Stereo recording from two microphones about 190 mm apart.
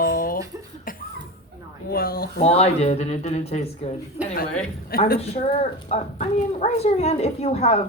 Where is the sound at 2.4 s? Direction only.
35° left (ahead or behind).